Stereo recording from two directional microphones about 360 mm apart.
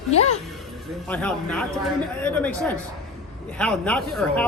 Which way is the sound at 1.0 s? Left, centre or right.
Centre.